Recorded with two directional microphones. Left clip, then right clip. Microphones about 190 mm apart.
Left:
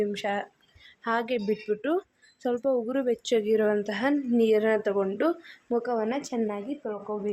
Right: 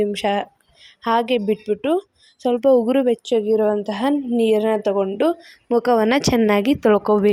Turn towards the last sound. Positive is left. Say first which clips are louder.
# right 17 dB
turn(degrees=-55)  # may be behind; listen again after turning